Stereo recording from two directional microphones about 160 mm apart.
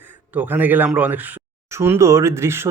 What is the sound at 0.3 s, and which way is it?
Speech, 10° right (ahead or behind).